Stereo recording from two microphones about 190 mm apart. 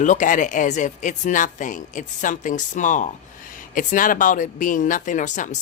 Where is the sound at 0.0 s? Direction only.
40° left (ahead or behind).